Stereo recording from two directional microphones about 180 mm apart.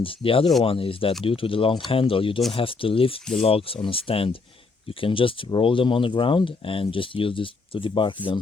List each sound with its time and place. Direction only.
0.0 s speech: 30° left (ahead or behind)